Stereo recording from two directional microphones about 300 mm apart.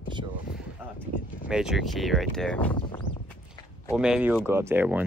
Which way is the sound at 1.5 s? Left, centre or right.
Centre.